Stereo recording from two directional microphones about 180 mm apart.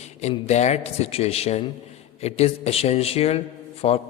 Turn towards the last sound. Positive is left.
turn(degrees=35)  # may be behind; listen again after turning